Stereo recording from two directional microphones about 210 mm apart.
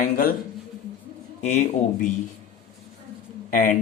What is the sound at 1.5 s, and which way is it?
Speech, 35° left (ahead or behind).